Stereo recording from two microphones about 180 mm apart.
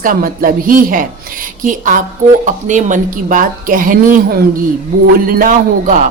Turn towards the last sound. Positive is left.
turn(degrees=-50)  # may be behind; listen again after turning